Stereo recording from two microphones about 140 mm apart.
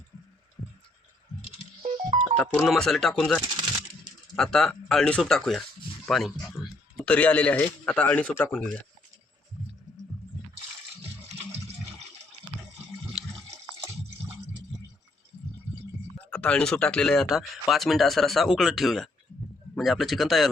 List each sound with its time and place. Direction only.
1.8 s music: 65° right (ahead or behind)
2.3 s speech: 5° left (ahead or behind)
13.2 s water: centre (ahead or behind)
16.1 s speech: 10° left (ahead or behind)